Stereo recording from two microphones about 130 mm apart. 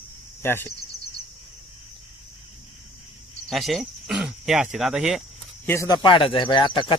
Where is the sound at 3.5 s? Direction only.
Centre (ahead or behind).